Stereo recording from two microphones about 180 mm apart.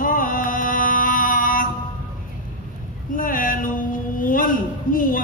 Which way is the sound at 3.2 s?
50° left (ahead or behind).